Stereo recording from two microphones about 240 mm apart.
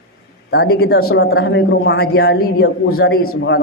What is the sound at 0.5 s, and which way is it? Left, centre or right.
A man's voice, left.